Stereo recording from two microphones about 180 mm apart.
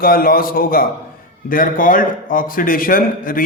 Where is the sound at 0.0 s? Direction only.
55° left (ahead or behind).